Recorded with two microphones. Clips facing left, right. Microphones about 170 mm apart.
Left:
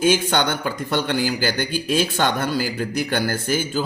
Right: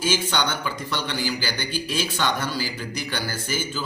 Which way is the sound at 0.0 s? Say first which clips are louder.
Left 6 dB; 55° left (ahead or behind).